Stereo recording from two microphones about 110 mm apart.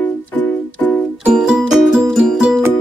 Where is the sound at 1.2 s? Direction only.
5° right (ahead or behind).